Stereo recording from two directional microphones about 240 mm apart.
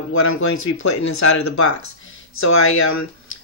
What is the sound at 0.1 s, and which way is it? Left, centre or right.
Speech, left.